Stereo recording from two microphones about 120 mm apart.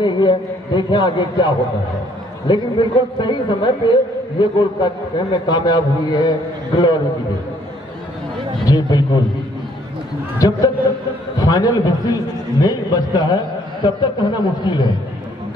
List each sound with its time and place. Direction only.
0.0 s a man's voice: 40° left (ahead or behind)
8.6 s a man's voice: 35° left (ahead or behind)
10.4 s a man's voice: 30° left (ahead or behind)